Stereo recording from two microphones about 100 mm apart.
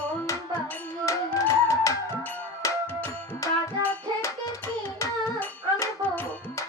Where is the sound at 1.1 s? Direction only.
30° left (ahead or behind).